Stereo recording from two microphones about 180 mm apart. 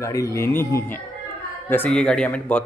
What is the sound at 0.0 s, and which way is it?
A man's voice, 15° left (ahead or behind).